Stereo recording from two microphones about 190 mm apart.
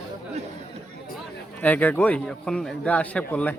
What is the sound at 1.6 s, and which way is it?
A man's voice, 10° left (ahead or behind).